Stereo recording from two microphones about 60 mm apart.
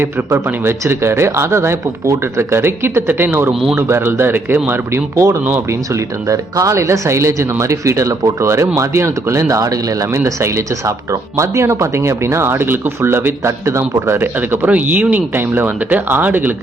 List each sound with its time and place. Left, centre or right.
0.3 s speech: right
5.1 s speech: right
14.2 s speech: right